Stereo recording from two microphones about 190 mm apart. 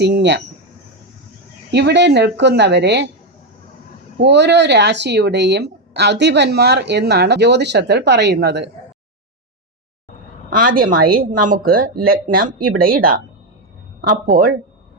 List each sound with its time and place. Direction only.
0.0 s speech: 65° right (ahead or behind)
1.7 s speech: 65° right (ahead or behind)
4.2 s speech: 65° right (ahead or behind)
10.5 s speech: 45° right (ahead or behind)
14.3 s speech: 50° right (ahead or behind)